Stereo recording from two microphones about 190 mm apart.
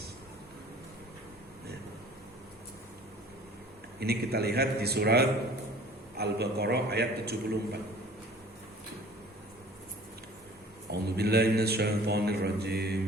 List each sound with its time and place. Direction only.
4.0 s mantra: 55° right (ahead or behind)
10.9 s mantra: 55° right (ahead or behind)